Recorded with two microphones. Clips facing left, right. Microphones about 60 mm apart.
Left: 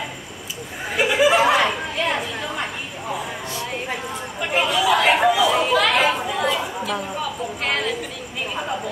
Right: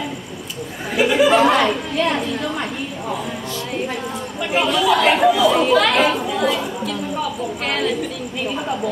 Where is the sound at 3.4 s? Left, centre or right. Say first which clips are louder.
Right 2 dB; left.